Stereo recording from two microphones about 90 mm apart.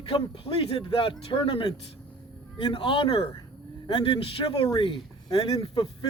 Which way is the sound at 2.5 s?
70° left (ahead or behind).